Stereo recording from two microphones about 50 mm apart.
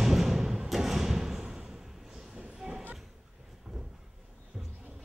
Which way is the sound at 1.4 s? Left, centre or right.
Centre.